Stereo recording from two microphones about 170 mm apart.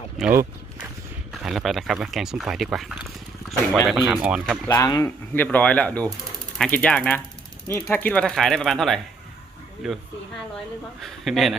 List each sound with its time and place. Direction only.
0.2 s speech: 10° right (ahead or behind)
1.3 s speech: centre (ahead or behind)
4.7 s speech: 20° left (ahead or behind)
5.0 s speech: 10° left (ahead or behind)
11.0 s speech: centre (ahead or behind)